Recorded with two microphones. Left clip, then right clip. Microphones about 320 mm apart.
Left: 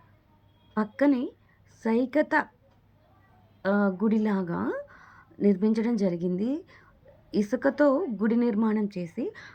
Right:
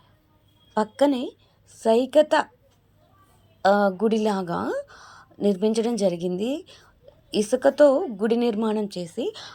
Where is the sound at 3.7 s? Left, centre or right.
Centre.